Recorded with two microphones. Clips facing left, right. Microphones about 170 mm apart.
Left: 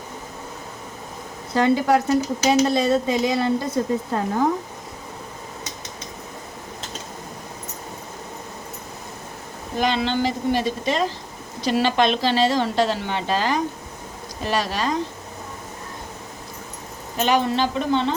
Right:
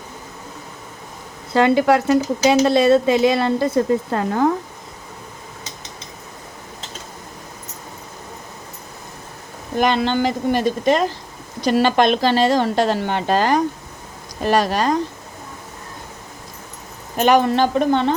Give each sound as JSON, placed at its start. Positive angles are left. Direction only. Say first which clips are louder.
{"t": 1.5, "sound": "speech", "louder": "right 3 dB", "side_deg": -75}
{"t": 4.1, "sound": "speech", "louder": "right 2 dB", "side_deg": -90}
{"t": 9.8, "sound": "a woman's voice", "louder": "right 3 dB", "side_deg": -50}
{"t": 17.2, "sound": "a woman's voice", "louder": "right 5 dB", "side_deg": -55}